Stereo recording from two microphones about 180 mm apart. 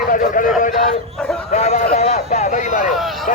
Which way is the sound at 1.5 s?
40° left (ahead or behind).